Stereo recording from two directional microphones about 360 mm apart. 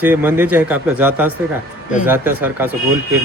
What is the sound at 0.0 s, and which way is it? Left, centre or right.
Speech, centre.